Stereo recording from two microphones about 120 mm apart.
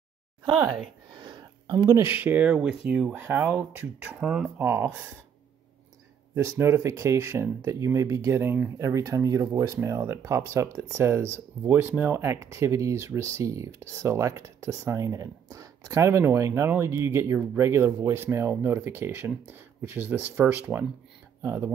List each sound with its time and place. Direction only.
1.1 s speech: 40° right (ahead or behind); by 3.2 s 5° right (ahead or behind)
3.2 s speech: 20° right (ahead or behind)
4.6 s speech: 20° right (ahead or behind)
6.3 s speech: 25° right (ahead or behind)